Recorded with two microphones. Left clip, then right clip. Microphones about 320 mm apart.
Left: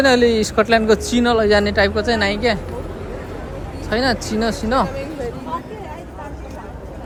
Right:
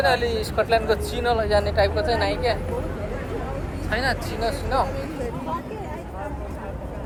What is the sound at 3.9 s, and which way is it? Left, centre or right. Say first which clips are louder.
Speech: left 6 dB; centre.